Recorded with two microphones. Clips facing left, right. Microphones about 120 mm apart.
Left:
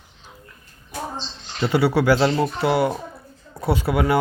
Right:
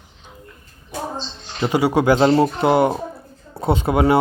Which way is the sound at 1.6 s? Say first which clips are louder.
Right 2 dB; 15° right (ahead or behind).